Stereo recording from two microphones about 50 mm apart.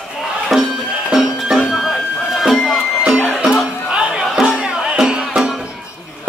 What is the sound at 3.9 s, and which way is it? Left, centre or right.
Music, centre.